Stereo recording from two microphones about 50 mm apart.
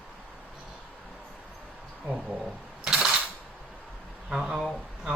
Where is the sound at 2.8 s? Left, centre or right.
Centre.